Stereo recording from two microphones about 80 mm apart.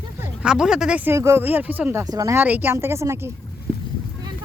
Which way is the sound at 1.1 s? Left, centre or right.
Right.